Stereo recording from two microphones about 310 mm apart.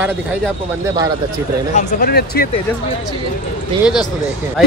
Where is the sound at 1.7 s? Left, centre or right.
Left.